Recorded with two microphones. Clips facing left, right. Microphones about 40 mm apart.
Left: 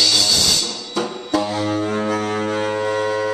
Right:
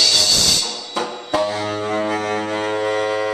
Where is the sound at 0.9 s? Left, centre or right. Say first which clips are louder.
Even; centre.